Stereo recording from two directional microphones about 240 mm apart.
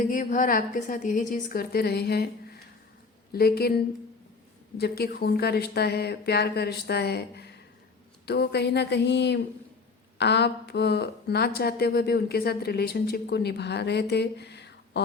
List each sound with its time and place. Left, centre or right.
0.0 s a woman's voice: left
3.3 s a woman's voice: left
4.8 s a woman's voice: left